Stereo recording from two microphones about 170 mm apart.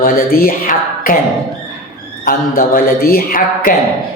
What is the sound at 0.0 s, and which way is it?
Speech, 60° left (ahead or behind).